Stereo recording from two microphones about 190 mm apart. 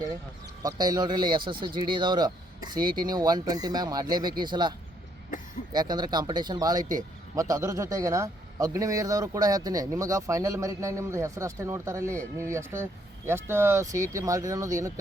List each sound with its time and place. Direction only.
0.6 s speech: 20° right (ahead or behind)
5.7 s a man's voice: 20° right (ahead or behind)